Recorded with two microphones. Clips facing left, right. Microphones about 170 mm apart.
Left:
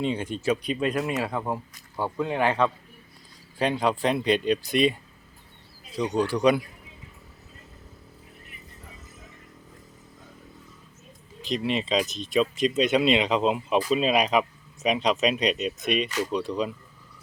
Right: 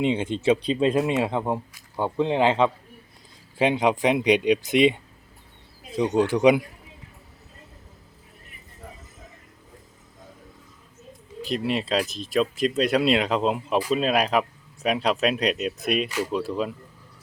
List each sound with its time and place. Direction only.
0.0 s speech: 20° right (ahead or behind)
6.0 s speech: 20° right (ahead or behind)
11.4 s speech: 5° right (ahead or behind)